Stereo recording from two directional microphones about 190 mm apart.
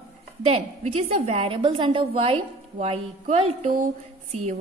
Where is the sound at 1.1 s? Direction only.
30° right (ahead or behind).